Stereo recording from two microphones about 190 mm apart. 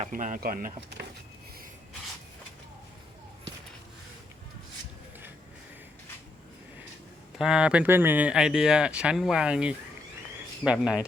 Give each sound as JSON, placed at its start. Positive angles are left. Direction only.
{"t": 0.0, "sound": "speech", "side_deg": -40}
{"t": 7.3, "sound": "speech", "side_deg": -5}